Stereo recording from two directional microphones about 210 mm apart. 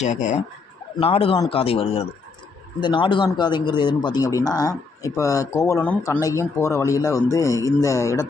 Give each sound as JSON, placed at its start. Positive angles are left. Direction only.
{"t": 0.0, "sound": "a man's voice", "side_deg": 35}